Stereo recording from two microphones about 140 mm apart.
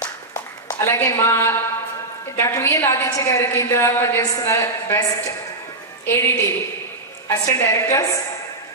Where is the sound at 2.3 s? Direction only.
15° left (ahead or behind).